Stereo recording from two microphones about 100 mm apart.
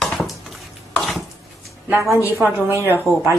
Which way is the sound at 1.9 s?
25° right (ahead or behind).